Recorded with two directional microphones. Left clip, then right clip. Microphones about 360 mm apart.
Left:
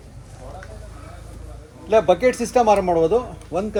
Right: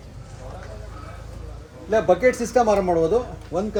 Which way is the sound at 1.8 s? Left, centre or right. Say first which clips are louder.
Left 2 dB; left.